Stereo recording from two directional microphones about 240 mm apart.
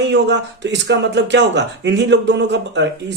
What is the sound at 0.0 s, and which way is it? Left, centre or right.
A man's voice, right.